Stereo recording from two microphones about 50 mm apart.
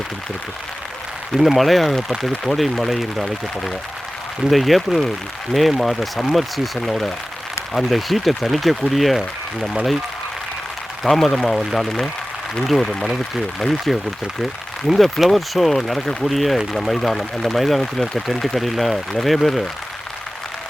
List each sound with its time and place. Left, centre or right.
1.4 s speech: centre
11.0 s speech: centre